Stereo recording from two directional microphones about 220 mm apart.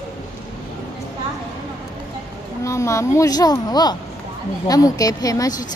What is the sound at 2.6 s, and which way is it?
A woman's voice, 15° left (ahead or behind).